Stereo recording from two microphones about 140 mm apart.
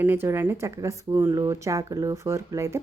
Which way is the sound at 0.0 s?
15° right (ahead or behind).